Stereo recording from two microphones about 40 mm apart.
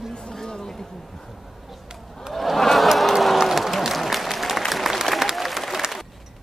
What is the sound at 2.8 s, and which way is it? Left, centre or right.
Applause, centre.